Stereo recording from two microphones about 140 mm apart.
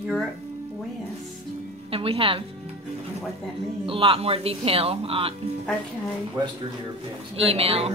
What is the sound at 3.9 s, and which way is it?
Speech, 40° right (ahead or behind).